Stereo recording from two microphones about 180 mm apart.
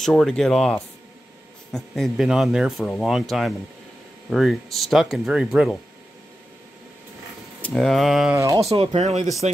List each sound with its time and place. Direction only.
0.0 s speech: centre (ahead or behind)
7.6 s speech: centre (ahead or behind)
8.4 s speech: 15° right (ahead or behind)
8.6 s speech: 35° right (ahead or behind)